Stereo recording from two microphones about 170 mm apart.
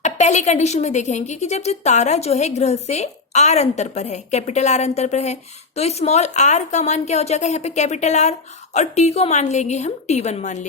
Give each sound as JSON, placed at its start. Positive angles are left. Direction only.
{"t": 0.0, "sound": "speech", "side_deg": 45}